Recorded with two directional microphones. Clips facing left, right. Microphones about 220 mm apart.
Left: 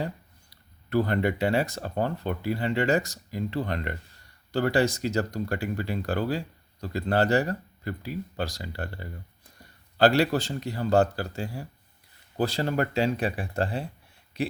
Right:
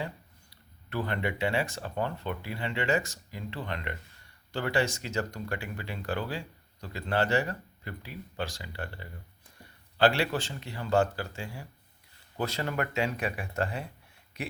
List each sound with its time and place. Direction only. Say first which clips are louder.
0.5 s speech: left 9 dB; 40° left (ahead or behind)